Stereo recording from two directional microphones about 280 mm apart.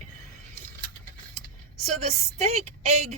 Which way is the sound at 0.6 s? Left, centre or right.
Right.